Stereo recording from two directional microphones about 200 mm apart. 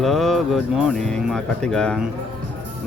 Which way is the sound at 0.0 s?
Centre (ahead or behind).